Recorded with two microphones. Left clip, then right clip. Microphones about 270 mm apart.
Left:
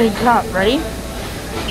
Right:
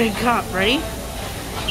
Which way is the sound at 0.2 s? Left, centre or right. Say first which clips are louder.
Left 5 dB; centre.